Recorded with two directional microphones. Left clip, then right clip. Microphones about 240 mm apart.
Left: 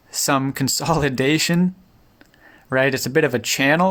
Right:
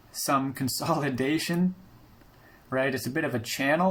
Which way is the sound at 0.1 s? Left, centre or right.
Left.